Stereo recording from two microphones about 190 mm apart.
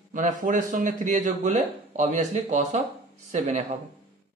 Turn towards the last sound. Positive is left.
turn(degrees=-35)  # may be behind; listen again after turning